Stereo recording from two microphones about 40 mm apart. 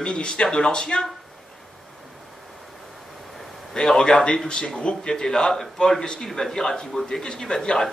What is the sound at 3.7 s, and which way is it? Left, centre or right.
A man's voice, centre.